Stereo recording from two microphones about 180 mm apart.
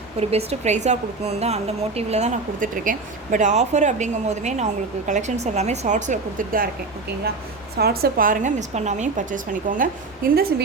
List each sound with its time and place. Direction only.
0.2 s a woman's voice: 35° right (ahead or behind)
7.8 s a woman's voice: 60° right (ahead or behind)